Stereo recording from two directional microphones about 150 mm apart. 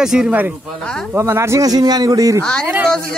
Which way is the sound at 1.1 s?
15° right (ahead or behind).